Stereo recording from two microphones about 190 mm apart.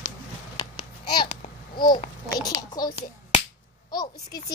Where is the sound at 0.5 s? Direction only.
25° left (ahead or behind).